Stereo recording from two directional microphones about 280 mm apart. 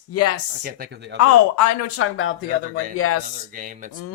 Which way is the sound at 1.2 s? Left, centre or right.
Left.